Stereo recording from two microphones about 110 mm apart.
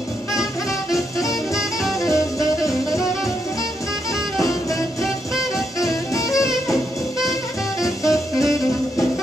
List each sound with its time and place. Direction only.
1.5 s music: centre (ahead or behind)
2.0 s music: 30° left (ahead or behind)
5.8 s music: 30° left (ahead or behind)
6.7 s music: centre (ahead or behind)
8.0 s music: 30° left (ahead or behind)